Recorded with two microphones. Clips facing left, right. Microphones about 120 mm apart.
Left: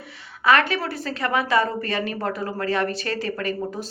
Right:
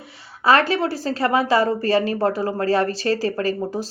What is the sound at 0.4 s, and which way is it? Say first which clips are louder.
A woman's voice: right 3 dB; 30° right (ahead or behind).